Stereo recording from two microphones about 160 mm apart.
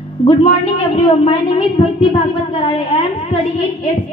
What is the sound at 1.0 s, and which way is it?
A woman's voice, 35° left (ahead or behind).